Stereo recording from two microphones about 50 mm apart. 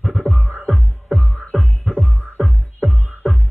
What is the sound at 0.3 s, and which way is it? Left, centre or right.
Music, right.